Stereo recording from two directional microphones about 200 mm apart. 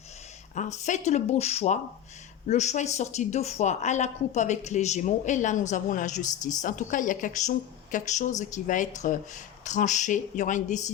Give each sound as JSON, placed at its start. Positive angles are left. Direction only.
{"t": 0.5, "sound": "a woman's voice", "side_deg": 35}